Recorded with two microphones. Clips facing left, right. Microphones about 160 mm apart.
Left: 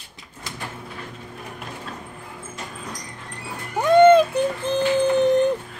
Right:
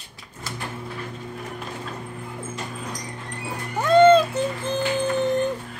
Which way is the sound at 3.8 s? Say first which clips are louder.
Left 2 dB; 15° left (ahead or behind).